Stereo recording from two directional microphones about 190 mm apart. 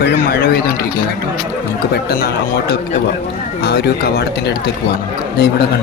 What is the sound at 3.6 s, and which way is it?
Speech, 55° left (ahead or behind).